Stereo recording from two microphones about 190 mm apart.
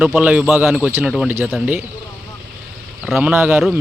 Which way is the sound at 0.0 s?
10° right (ahead or behind).